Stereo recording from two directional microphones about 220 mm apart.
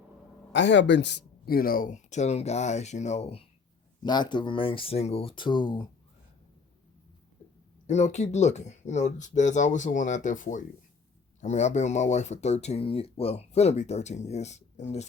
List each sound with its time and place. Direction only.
0.5 s speech: 55° left (ahead or behind); by 5.9 s 20° left (ahead or behind)
7.9 s speech: 30° left (ahead or behind)